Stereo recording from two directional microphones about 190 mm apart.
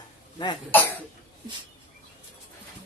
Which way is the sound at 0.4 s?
20° left (ahead or behind).